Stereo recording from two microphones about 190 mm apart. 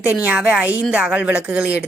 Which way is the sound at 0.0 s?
10° right (ahead or behind).